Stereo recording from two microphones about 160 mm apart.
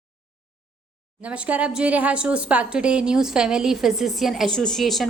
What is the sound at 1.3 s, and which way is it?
A woman's voice, 10° right (ahead or behind).